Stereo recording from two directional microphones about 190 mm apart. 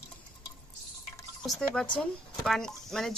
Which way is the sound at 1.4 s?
5° left (ahead or behind).